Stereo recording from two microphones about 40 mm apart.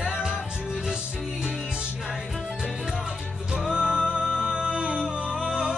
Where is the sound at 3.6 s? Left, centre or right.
Right.